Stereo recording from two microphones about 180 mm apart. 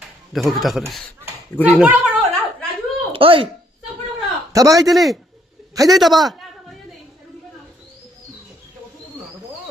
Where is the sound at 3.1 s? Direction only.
30° right (ahead or behind).